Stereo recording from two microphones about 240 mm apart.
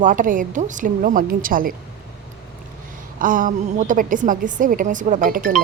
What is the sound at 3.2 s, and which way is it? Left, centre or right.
A woman's voice, right.